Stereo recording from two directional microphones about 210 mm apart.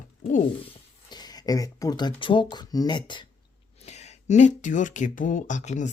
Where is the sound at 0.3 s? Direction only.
35° left (ahead or behind).